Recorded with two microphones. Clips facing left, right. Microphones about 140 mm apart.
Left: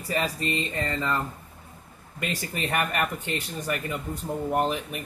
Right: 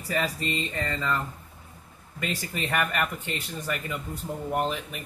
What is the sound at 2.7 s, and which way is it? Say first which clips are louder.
Speech: even; 35° left (ahead or behind).